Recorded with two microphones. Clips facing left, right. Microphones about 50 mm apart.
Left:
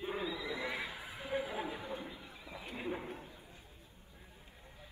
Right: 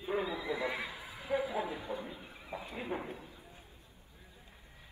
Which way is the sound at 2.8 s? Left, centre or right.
Right.